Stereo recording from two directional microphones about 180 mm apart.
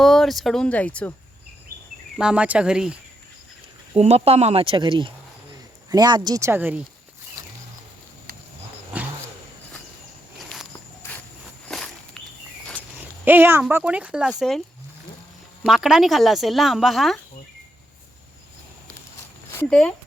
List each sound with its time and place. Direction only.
0.0 s speech: centre (ahead or behind)
2.1 s speech: 5° right (ahead or behind)
3.9 s speech: 35° right (ahead or behind); by 6.8 s 10° right (ahead or behind)
10.3 s a sound: centre (ahead or behind)
11.7 s walk: 5° left (ahead or behind)
13.2 s speech: 10° right (ahead or behind)
15.6 s speech: centre (ahead or behind)